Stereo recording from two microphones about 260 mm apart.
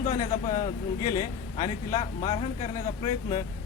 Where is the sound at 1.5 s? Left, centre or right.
Centre.